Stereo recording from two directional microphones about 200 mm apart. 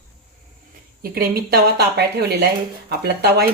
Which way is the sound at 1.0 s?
50° right (ahead or behind).